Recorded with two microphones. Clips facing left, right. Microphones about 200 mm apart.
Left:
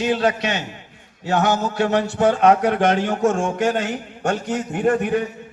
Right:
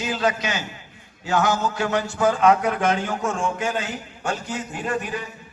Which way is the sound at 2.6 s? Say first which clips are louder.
Left 5 dB; 70° left (ahead or behind).